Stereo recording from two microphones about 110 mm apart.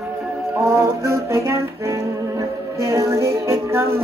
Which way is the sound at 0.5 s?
25° right (ahead or behind).